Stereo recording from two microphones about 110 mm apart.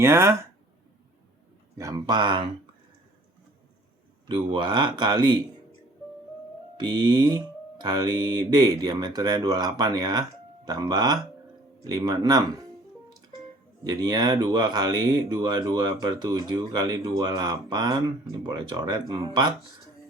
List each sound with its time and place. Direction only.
0.0 s speech: 25° right (ahead or behind)
1.8 s speech: 35° right (ahead or behind)
4.3 s speech: 45° right (ahead or behind)
6.7 s speech: 40° right (ahead or behind)
13.8 s speech: 35° right (ahead or behind)